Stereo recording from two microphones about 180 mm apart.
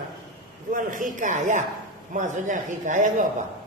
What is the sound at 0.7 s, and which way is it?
A man's voice, 45° right (ahead or behind).